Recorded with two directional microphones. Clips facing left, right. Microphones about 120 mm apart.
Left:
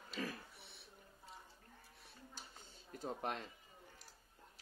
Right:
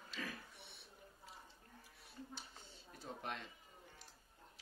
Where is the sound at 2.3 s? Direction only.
45° left (ahead or behind).